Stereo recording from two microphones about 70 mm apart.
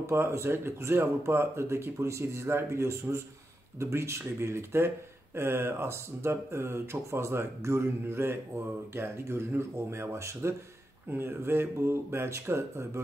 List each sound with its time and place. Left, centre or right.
0.0 s speech: right